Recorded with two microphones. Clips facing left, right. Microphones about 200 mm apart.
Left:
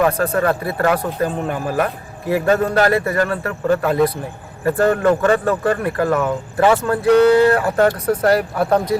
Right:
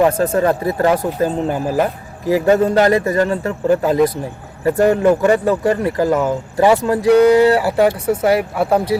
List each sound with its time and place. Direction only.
0.3 s speech: 20° right (ahead or behind)